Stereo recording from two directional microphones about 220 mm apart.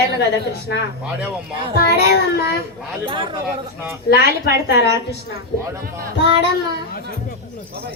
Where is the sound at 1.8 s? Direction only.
45° left (ahead or behind).